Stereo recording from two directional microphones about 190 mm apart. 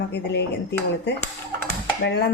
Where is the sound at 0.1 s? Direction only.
60° left (ahead or behind).